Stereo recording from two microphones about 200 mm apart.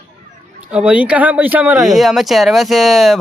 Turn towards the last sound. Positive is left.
turn(degrees=0)  # may be behind; listen again after turning